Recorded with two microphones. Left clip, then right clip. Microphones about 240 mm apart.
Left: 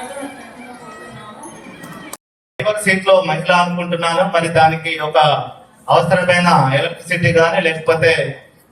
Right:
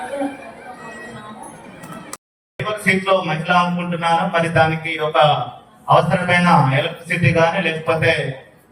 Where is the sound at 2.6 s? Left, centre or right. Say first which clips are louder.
Left 3 dB; left.